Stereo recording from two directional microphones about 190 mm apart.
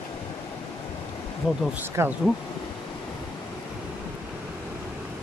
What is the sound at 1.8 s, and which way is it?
Speech, 10° right (ahead or behind).